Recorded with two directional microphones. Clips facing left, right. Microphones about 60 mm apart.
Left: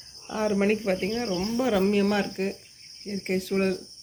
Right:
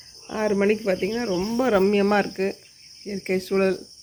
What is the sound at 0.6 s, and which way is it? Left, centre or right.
Cricket, centre.